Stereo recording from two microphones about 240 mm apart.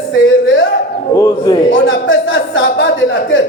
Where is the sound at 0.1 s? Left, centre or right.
Left.